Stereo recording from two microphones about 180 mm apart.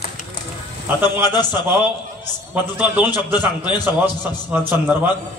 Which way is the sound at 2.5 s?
10° right (ahead or behind).